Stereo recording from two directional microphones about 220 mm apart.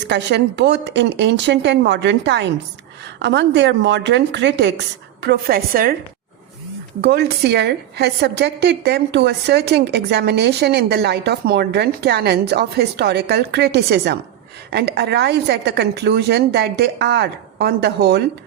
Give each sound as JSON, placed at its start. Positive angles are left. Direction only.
{"t": 0.0, "sound": "a woman's voice", "side_deg": -50}
{"t": 7.0, "sound": "a woman's voice", "side_deg": -45}